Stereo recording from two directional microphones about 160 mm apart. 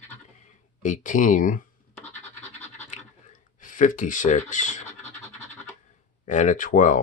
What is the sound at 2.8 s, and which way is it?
Scratch, 45° left (ahead or behind).